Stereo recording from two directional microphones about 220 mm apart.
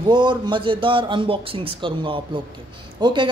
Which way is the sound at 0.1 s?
20° right (ahead or behind).